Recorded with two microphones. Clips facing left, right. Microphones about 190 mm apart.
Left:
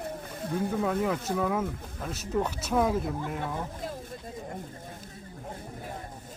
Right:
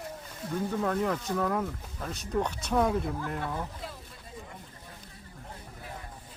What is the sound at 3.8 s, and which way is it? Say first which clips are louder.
Vehicle: left 6 dB; 45° left (ahead or behind).